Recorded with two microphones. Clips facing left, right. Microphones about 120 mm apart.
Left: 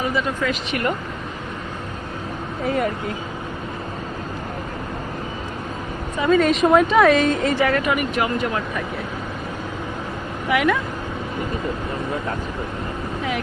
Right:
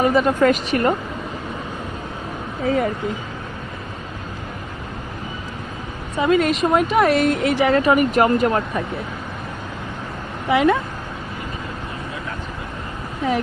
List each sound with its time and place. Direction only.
0.0 s speech: 50° right (ahead or behind)
2.6 s speech: 20° right (ahead or behind)
6.3 s a woman's voice: centre (ahead or behind)
7.7 s speech: 30° right (ahead or behind)
10.5 s speech: 25° right (ahead or behind)